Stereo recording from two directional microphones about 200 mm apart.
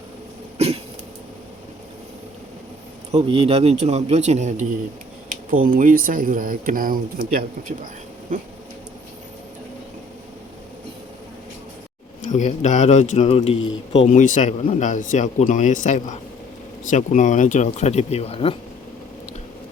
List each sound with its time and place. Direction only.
3.2 s a man's voice: 30° right (ahead or behind); by 8.4 s 45° right (ahead or behind)
12.2 s speech: 35° left (ahead or behind)